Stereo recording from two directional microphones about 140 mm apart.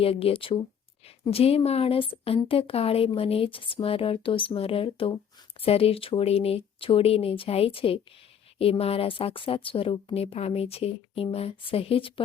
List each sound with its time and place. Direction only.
0.0 s a woman's voice: 45° left (ahead or behind)